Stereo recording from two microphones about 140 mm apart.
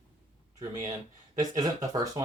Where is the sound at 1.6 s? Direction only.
25° right (ahead or behind).